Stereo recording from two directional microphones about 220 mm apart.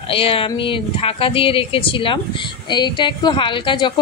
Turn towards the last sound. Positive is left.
turn(degrees=20)  # may be behind; listen again after turning